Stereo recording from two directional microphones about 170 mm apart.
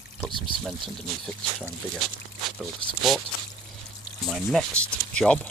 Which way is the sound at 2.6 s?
Centre (ahead or behind).